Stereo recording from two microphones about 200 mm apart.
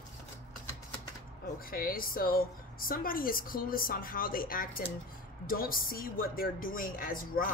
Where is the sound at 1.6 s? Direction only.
45° left (ahead or behind).